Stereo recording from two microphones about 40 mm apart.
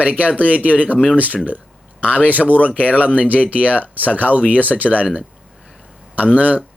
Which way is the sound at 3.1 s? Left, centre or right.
Right.